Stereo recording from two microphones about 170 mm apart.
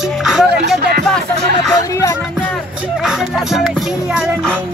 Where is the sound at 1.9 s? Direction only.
20° left (ahead or behind).